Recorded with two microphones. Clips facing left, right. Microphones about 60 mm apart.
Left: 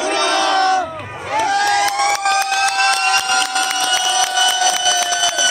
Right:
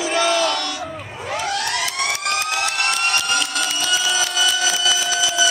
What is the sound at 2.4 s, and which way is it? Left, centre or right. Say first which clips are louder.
Vehicle: left 6 dB; left.